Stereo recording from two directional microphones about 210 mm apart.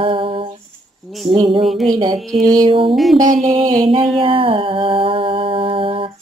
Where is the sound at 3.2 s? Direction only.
35° right (ahead or behind).